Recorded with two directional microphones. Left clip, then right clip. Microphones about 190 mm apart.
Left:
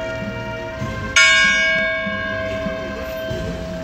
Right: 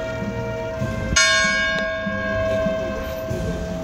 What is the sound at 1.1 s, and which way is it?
Church bell, 35° right (ahead or behind).